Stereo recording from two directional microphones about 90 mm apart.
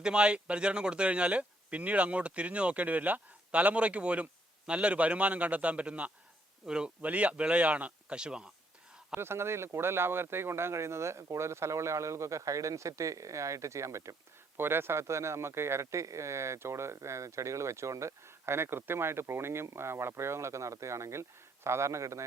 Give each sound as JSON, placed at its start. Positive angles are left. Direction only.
{"t": 0.0, "sound": "speech", "side_deg": -10}
{"t": 9.1, "sound": "speech", "side_deg": -25}